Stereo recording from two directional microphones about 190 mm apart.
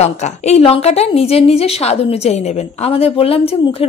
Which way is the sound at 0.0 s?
35° left (ahead or behind).